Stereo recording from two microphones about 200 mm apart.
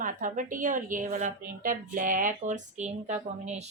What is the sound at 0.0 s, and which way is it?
A woman's voice, 40° right (ahead or behind).